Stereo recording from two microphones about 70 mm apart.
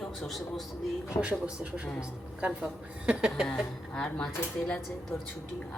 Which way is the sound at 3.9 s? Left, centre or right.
Centre.